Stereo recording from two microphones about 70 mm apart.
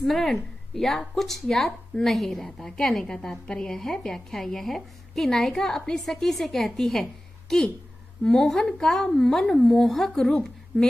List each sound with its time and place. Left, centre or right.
0.0 s a woman's voice: centre